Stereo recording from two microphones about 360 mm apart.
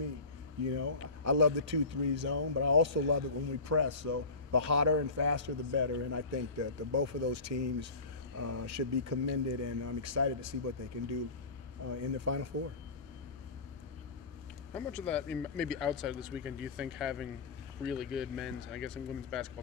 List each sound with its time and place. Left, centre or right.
0.7 s speech: right
11.9 s speech: right
14.7 s speech: centre